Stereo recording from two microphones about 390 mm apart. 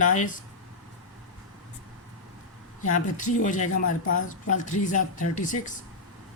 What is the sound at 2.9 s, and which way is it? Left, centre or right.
Speech, centre.